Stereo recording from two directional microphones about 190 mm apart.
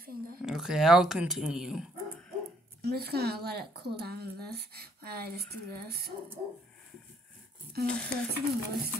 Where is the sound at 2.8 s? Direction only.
55° right (ahead or behind).